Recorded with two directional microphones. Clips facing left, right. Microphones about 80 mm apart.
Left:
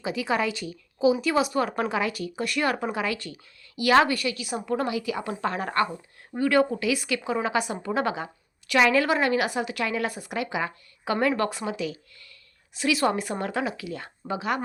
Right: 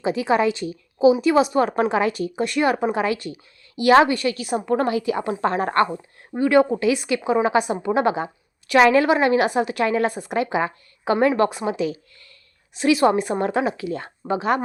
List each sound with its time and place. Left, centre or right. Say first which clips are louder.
0.0 s a woman's voice: right 7 dB; right
4.3 s a woman's voice: right 6 dB; right
6.3 s a woman's voice: right 5 dB; right